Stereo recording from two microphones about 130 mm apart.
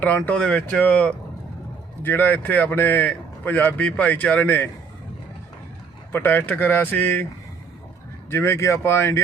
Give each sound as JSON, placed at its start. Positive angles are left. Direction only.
{"t": 0.0, "sound": "speech", "side_deg": 10}
{"t": 6.1, "sound": "speech", "side_deg": 15}
{"t": 8.3, "sound": "speech", "side_deg": 20}